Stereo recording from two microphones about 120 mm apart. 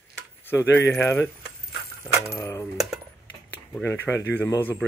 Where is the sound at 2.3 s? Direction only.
25° left (ahead or behind).